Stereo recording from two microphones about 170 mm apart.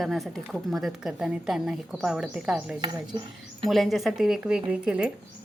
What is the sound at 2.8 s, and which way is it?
Speech, 25° right (ahead or behind).